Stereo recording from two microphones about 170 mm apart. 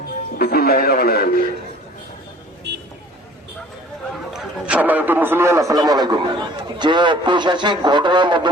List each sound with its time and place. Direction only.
0.3 s speech: 60° left (ahead or behind)
2.7 s vehicle: 80° right
4.3 s a man's voice: 5° right (ahead or behind); by 8.4 s 25° right (ahead or behind)